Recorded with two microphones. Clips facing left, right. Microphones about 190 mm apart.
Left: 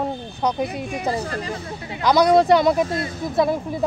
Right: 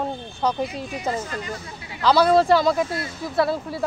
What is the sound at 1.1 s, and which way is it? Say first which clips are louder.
Speech: left 2 dB; 35° left (ahead or behind).